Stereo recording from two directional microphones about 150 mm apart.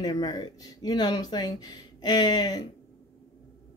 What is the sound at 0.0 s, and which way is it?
A woman's voice, 25° left (ahead or behind).